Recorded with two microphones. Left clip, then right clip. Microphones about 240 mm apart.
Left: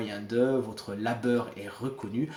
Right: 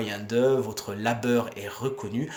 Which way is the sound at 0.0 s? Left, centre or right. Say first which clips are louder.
Right 4 dB; right.